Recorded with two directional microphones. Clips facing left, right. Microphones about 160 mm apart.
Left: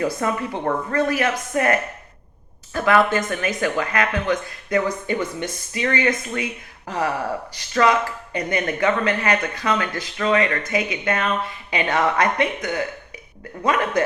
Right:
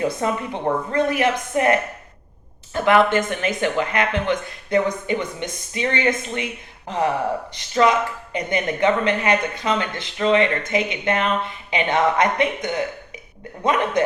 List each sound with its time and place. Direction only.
0.0 s speech: 25° right (ahead or behind)